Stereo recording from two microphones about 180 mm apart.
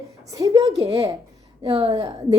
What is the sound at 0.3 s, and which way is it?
Speech, 25° right (ahead or behind).